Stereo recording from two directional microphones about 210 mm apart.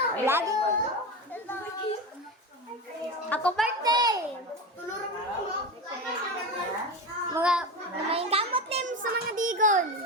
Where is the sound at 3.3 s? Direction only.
5° left (ahead or behind).